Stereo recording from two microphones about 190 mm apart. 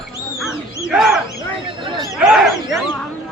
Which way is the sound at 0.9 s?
Centre (ahead or behind).